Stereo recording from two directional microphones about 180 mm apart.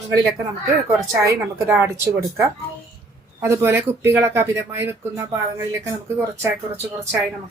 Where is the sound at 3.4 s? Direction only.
15° right (ahead or behind).